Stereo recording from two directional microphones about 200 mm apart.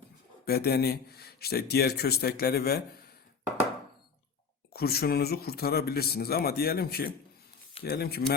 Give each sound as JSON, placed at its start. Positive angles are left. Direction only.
{"t": 0.4, "sound": "a man's voice", "side_deg": 50}
{"t": 4.7, "sound": "a man's voice", "side_deg": 50}